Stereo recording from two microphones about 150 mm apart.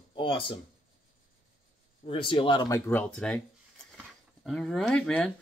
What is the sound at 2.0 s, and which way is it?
Speech, 35° left (ahead or behind).